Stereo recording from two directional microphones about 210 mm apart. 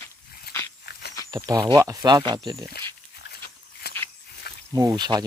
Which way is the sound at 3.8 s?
50° left (ahead or behind).